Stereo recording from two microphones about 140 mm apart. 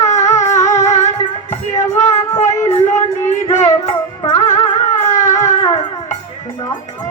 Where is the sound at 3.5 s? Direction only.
45° left (ahead or behind).